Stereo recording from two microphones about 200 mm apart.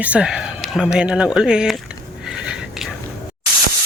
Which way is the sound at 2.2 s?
5° right (ahead or behind).